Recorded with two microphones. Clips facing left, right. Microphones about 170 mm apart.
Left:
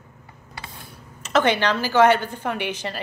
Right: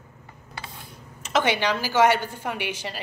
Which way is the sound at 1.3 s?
10° right (ahead or behind).